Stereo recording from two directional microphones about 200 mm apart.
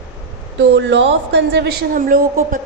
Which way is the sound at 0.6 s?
65° right (ahead or behind).